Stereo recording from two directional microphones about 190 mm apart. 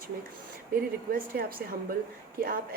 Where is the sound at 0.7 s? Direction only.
50° right (ahead or behind).